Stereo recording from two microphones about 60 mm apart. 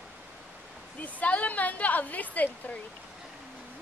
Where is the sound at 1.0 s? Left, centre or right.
Left.